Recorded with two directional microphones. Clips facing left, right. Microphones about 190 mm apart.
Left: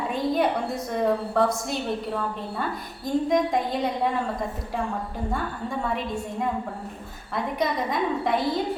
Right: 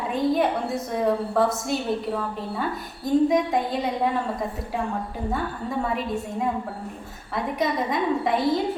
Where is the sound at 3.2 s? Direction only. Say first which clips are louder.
Right 1 dB; centre (ahead or behind).